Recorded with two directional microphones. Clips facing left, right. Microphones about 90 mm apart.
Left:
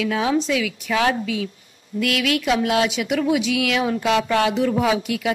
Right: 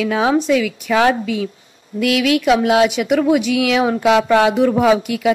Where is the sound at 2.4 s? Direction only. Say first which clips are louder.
Right 6 dB; 50° right (ahead or behind).